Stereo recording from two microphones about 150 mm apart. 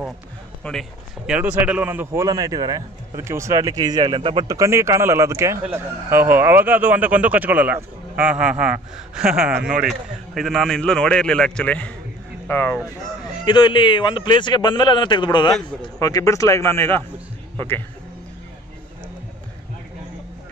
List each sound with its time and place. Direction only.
0.7 s a man's voice: centre (ahead or behind)
2.2 s a man's voice: 25° right (ahead or behind)
4.5 s a man's voice: 20° right (ahead or behind); by 12.8 s 15° left (ahead or behind)
13.3 s a man's voice: 30° left (ahead or behind)